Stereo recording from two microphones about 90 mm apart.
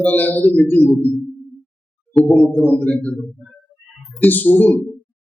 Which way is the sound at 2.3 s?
20° left (ahead or behind).